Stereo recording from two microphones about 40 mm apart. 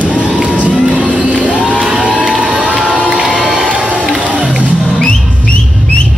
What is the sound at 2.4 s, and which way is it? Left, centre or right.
Crowd, right.